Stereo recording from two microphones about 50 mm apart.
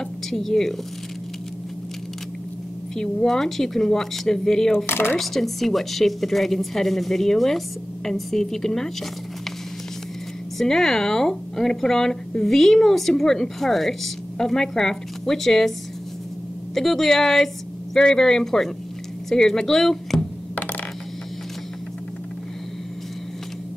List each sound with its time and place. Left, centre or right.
0.3 s a woman's voice: centre
3.0 s speech: centre
4.8 s speech: left
5.2 s a woman's voice: centre
10.6 s speech: centre
16.7 s a woman's voice: centre